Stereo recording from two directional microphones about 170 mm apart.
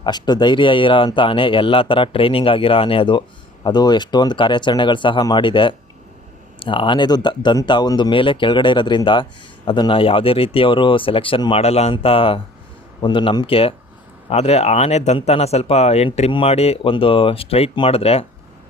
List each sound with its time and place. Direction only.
0.0 s speech: 25° left (ahead or behind)